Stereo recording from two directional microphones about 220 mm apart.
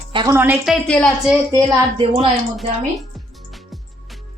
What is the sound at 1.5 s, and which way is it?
Speech, 20° right (ahead or behind).